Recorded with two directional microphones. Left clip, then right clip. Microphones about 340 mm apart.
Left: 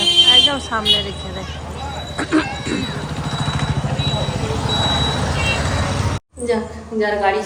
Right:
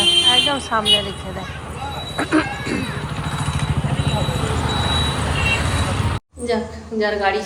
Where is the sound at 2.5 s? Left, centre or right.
Left.